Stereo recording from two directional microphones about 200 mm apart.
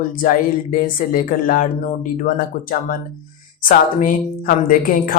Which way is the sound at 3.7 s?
45° left (ahead or behind).